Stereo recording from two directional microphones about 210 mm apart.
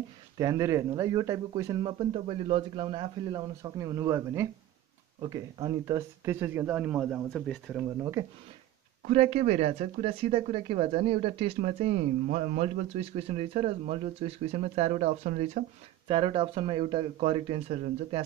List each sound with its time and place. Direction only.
0.4 s speech: 15° right (ahead or behind); by 7.8 s centre (ahead or behind)
8.0 s speech: 15° right (ahead or behind)
9.0 s speech: 30° right (ahead or behind)